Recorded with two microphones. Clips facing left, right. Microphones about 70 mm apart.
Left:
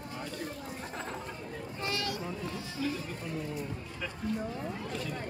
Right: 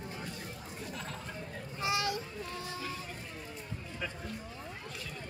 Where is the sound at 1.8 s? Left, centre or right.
Centre.